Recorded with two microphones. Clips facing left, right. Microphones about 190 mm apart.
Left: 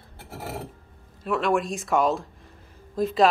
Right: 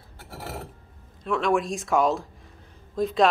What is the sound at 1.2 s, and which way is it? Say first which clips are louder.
Speech: even; 5° left (ahead or behind).